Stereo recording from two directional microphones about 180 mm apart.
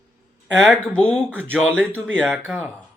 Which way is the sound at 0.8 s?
5° left (ahead or behind).